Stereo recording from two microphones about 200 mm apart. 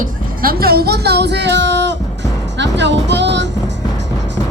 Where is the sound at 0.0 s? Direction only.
50° right (ahead or behind).